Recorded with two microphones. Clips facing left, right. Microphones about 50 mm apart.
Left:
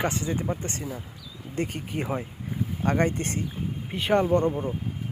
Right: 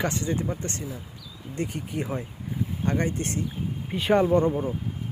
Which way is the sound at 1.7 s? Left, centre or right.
Left.